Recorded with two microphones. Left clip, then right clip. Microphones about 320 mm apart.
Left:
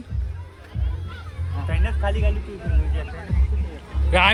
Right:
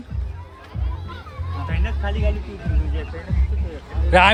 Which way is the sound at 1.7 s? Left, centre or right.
Centre.